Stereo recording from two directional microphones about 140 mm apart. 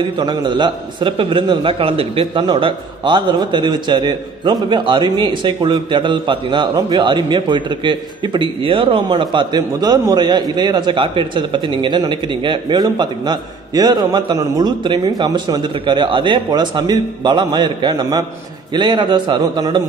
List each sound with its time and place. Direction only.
0.2 s a man's voice: 30° right (ahead or behind)